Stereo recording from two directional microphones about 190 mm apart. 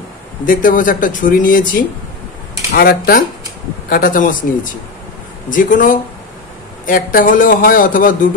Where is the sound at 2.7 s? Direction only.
50° left (ahead or behind).